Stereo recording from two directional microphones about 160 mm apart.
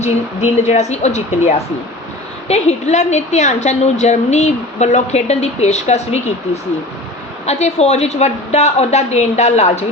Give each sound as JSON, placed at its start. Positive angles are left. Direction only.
{"t": 0.5, "sound": "a woman's voice", "side_deg": 45}